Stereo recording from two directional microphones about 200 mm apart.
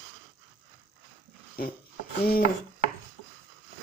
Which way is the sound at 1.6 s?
45° left (ahead or behind).